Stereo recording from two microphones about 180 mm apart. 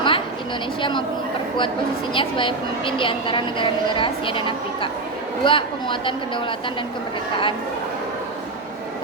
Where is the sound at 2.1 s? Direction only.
30° left (ahead or behind).